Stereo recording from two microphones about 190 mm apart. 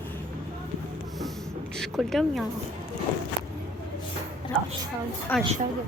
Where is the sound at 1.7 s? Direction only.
Centre (ahead or behind).